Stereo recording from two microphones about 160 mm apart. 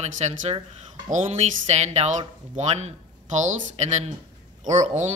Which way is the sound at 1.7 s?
45° right (ahead or behind).